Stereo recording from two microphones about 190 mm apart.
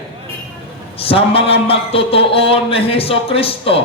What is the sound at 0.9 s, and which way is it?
A man's voice, 30° left (ahead or behind).